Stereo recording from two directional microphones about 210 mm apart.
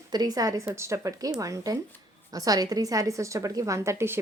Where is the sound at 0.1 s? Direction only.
20° right (ahead or behind).